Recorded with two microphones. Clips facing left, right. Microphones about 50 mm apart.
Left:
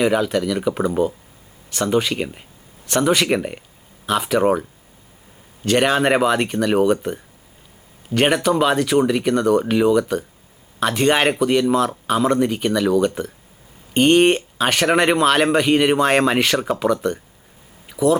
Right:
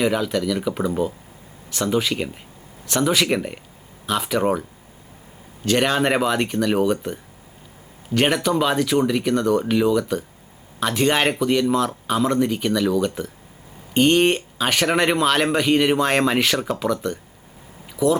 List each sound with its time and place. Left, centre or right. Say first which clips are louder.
0.0 s speech: left 3 dB; centre
5.6 s speech: left 2 dB; centre